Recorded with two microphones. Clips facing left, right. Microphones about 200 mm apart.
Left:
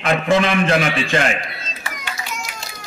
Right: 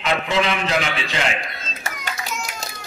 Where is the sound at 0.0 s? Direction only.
50° left (ahead or behind).